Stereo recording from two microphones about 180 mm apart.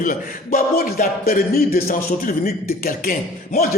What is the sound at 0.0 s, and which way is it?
Speech, 50° left (ahead or behind).